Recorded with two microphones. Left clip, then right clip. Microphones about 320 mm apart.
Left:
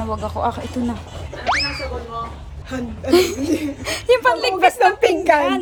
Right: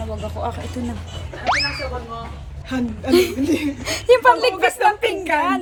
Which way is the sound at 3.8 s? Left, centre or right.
Centre.